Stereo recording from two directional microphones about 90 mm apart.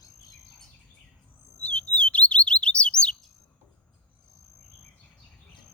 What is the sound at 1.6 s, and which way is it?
Chirp, 15° left (ahead or behind).